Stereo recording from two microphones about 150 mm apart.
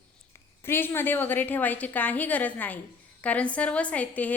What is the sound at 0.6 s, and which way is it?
A woman's voice, 15° left (ahead or behind).